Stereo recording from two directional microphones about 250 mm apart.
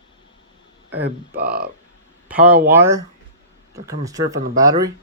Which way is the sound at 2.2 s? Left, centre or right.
Centre.